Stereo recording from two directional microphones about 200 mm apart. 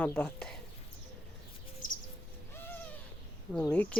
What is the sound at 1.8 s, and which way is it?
Bird, 40° left (ahead or behind).